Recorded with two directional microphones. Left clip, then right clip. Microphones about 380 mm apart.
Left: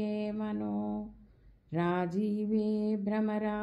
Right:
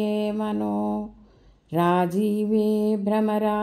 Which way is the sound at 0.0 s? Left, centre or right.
Right.